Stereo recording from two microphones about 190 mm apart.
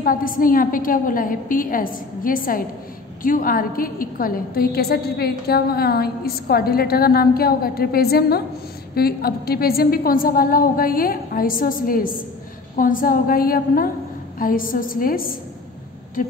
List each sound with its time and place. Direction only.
0.0 s a woman's voice: 45° left (ahead or behind)